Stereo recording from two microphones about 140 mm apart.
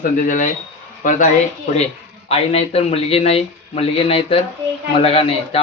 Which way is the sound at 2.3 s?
45° left (ahead or behind).